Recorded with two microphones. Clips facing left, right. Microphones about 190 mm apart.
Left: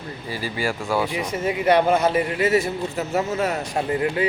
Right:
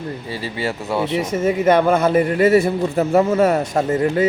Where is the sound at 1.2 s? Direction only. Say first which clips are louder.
Right 5 dB; 45° right (ahead or behind).